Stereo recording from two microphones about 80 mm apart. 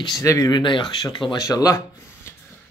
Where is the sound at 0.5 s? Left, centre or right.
Left.